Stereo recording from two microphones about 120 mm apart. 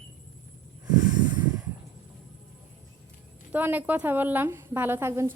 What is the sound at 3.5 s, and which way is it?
A woman's voice, 15° right (ahead or behind).